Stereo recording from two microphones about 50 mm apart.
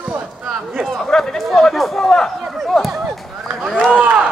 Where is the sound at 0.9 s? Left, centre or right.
Centre.